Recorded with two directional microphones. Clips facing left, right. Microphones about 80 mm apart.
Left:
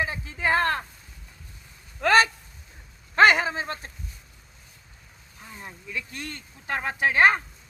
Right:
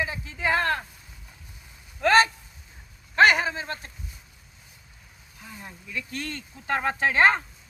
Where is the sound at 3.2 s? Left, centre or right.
Left.